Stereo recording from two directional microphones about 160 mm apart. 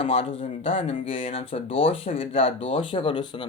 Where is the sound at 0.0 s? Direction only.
40° left (ahead or behind).